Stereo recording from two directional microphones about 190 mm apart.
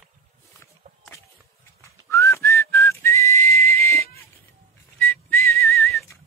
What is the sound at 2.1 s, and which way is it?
Whistling, 15° left (ahead or behind).